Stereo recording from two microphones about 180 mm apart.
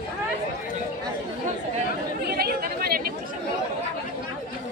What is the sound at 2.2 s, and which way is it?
Chatter, 60° right (ahead or behind).